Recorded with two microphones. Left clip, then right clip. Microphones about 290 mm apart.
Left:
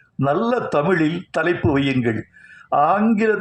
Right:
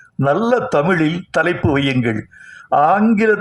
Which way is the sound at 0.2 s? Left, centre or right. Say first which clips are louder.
Right 4 dB; right.